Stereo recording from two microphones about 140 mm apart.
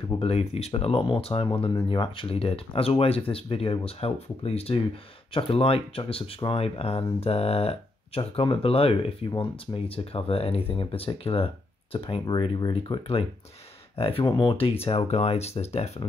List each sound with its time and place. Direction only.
0.2 s speech: 50° left (ahead or behind)